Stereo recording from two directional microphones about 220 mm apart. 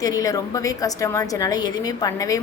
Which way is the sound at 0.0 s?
15° left (ahead or behind).